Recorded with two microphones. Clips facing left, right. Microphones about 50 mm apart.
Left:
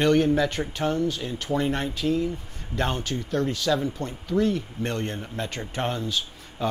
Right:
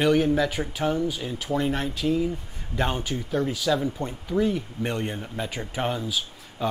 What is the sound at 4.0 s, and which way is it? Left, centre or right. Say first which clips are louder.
Speech: even; centre.